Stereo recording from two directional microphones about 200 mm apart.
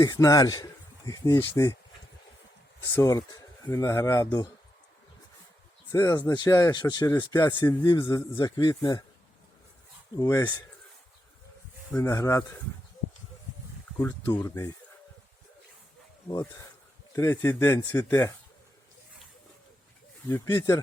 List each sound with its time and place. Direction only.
0.0 s speech: 20° left (ahead or behind)
2.9 s speech: 15° left (ahead or behind)
5.9 s speech: 15° left (ahead or behind)
10.2 s speech: 20° left (ahead or behind)
11.9 s speech: 10° left (ahead or behind)
14.0 s speech: 15° left (ahead or behind)
16.3 s speech: 15° left (ahead or behind)
20.2 s speech: 15° left (ahead or behind)